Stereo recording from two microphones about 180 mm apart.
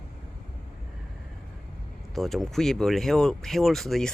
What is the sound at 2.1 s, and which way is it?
Speech, centre (ahead or behind).